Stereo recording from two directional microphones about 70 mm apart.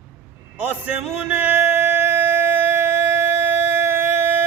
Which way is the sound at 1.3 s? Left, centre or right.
Right.